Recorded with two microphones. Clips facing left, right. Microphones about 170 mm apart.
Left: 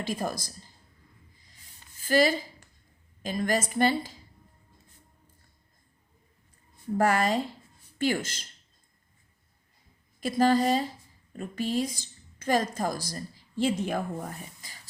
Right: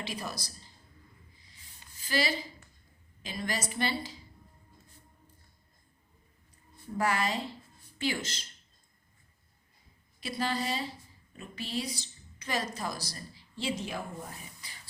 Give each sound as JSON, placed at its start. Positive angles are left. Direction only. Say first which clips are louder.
{"t": 0.0, "sound": "a woman's voice", "louder": "left 7 dB", "side_deg": 45}
{"t": 2.0, "sound": "a woman's voice", "louder": "left 8 dB", "side_deg": 50}
{"t": 6.9, "sound": "a woman's voice", "louder": "left 6 dB", "side_deg": 50}
{"t": 10.2, "sound": "a woman's voice", "louder": "left 10 dB", "side_deg": 50}